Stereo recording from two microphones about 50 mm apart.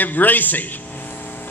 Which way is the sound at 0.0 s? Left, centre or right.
Left.